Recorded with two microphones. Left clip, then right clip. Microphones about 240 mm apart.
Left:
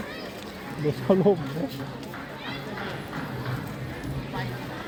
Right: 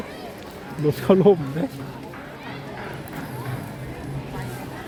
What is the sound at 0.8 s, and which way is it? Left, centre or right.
Speech, right.